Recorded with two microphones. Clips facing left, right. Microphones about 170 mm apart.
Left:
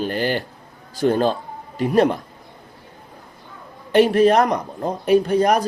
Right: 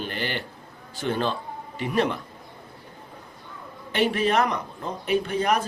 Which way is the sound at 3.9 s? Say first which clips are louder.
Left 8 dB; 40° left (ahead or behind).